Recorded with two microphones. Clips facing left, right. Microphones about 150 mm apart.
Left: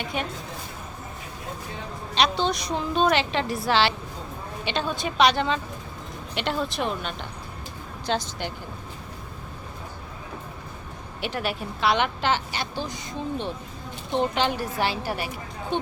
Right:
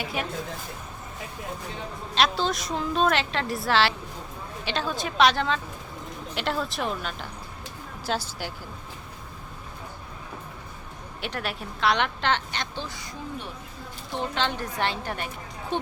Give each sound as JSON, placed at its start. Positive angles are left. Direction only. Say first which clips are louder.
{"t": 0.0, "sound": "a woman's voice", "louder": "left 1 dB", "side_deg": -5}
{"t": 2.1, "sound": "a woman's voice", "louder": "left 1 dB", "side_deg": 0}
{"t": 11.2, "sound": "a woman's voice", "louder": "left 4 dB", "side_deg": 0}
{"t": 14.1, "sound": "a woman's voice", "louder": "left 5 dB", "side_deg": 15}